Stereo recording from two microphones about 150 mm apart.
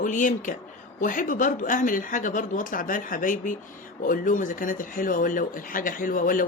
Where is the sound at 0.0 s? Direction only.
60° left (ahead or behind).